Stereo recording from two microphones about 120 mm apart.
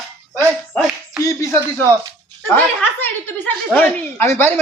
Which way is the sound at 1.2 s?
25° left (ahead or behind).